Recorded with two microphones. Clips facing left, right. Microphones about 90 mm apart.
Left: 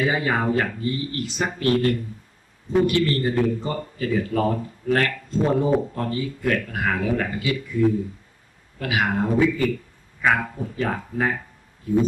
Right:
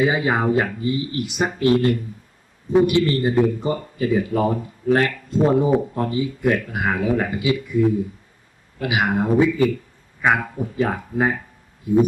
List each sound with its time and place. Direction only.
0.0 s a man's voice: 15° right (ahead or behind)
8.8 s a man's voice: 15° right (ahead or behind)